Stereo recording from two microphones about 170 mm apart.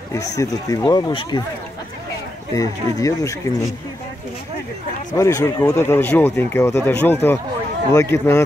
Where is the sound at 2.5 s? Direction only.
20° left (ahead or behind).